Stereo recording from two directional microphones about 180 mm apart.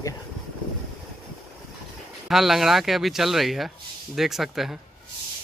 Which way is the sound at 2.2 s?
Centre (ahead or behind).